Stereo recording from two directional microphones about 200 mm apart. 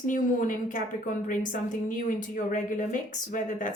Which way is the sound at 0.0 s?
40° left (ahead or behind).